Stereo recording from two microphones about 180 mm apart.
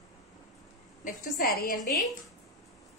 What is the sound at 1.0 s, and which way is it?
Speech, 50° left (ahead or behind).